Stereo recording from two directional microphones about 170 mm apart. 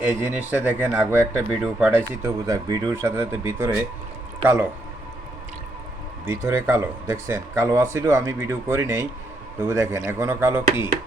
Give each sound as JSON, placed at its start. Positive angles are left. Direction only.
{"t": 0.0, "sound": "speech", "side_deg": -10}
{"t": 6.2, "sound": "speech", "side_deg": -15}